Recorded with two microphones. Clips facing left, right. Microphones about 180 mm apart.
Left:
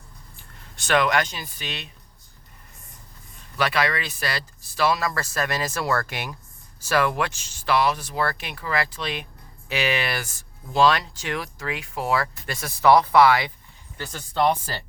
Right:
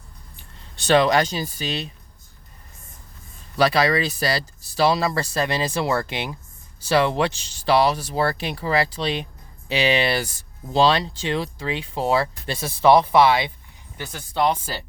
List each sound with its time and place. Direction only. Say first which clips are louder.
0.9 s speech: right 4 dB; 30° right (ahead or behind)
3.6 s speech: right 5 dB; 35° right (ahead or behind)
14.0 s speech: even; 10° right (ahead or behind)